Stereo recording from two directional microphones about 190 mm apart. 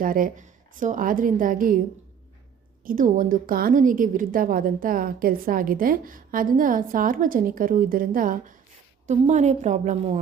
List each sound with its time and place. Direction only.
0.0 s a woman's voice: 45° right (ahead or behind)
2.8 s a woman's voice: 45° right (ahead or behind)